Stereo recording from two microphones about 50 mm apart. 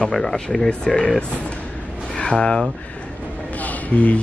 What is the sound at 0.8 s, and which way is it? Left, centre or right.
Speech, left.